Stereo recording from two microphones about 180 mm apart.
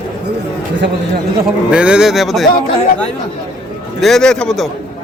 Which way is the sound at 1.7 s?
5° right (ahead or behind).